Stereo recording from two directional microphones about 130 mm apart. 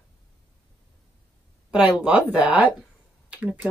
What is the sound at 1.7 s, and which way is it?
Speech, 10° right (ahead or behind).